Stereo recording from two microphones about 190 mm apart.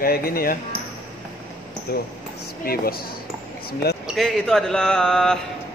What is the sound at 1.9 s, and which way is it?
Speech, 55° left (ahead or behind).